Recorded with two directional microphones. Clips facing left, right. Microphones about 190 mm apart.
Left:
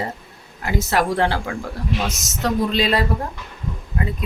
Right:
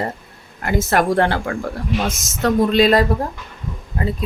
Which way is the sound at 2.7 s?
45° right (ahead or behind).